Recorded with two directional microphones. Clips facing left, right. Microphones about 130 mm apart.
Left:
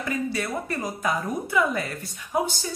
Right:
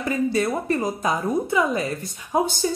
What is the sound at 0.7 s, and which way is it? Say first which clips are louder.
A woman's voice: right 5 dB; 25° right (ahead or behind).